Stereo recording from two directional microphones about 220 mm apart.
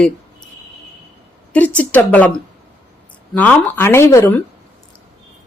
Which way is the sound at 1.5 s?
5° left (ahead or behind).